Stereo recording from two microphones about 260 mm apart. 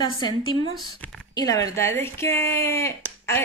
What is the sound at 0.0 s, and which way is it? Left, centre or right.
Speech, centre.